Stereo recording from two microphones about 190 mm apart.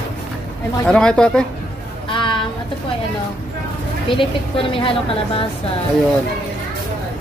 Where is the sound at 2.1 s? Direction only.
25° left (ahead or behind).